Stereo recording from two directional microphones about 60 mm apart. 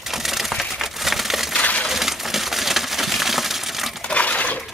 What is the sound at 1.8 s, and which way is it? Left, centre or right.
Crushing, centre.